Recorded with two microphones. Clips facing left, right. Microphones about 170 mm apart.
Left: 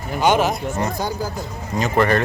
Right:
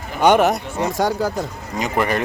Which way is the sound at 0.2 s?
60° right (ahead or behind).